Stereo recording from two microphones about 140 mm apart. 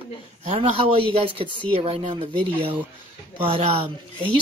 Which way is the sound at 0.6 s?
40° right (ahead or behind).